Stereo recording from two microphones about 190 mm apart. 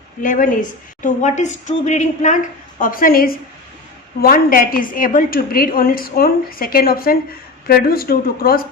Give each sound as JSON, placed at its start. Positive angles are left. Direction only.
{"t": 0.2, "sound": "a woman's voice", "side_deg": 45}